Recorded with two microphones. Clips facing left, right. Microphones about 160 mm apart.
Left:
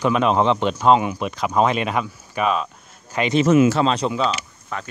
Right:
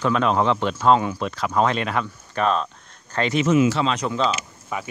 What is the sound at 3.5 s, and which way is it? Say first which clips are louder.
Speech: left 3 dB; 50° left (ahead or behind).